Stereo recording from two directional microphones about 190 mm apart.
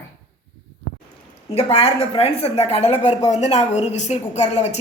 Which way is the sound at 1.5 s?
35° left (ahead or behind).